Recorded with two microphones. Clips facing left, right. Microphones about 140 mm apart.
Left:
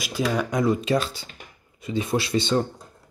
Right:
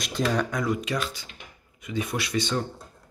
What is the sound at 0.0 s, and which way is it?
Speech, 5° left (ahead or behind).